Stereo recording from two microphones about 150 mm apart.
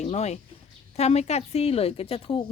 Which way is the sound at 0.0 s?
45° left (ahead or behind).